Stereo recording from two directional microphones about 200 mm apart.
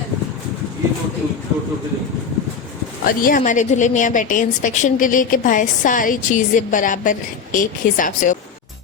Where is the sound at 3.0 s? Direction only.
45° left (ahead or behind).